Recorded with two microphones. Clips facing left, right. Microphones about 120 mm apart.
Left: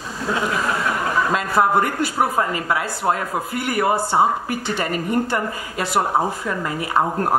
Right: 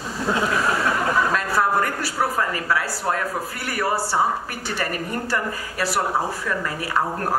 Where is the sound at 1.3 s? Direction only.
20° left (ahead or behind).